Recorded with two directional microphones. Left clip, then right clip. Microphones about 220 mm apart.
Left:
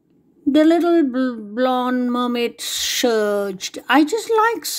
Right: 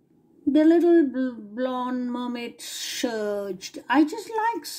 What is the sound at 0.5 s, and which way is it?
Speech, 30° left (ahead or behind).